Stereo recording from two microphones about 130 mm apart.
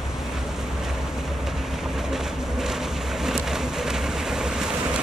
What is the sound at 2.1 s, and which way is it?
Vehicle, 5° right (ahead or behind).